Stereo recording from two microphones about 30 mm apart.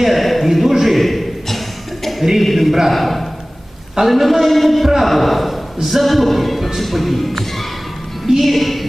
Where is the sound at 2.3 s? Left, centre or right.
Centre.